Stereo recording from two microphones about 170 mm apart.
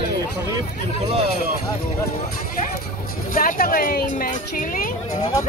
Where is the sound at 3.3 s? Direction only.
55° left (ahead or behind).